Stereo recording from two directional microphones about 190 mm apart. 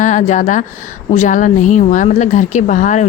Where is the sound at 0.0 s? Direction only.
40° left (ahead or behind).